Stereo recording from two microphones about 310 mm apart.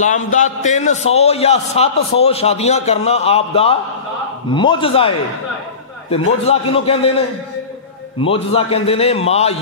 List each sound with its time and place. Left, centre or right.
0.0 s a man's voice: left
6.4 s a man's voice: centre